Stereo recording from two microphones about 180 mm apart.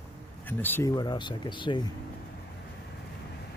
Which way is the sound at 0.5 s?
10° left (ahead or behind).